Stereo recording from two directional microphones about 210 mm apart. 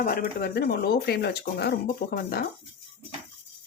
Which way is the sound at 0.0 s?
45° left (ahead or behind).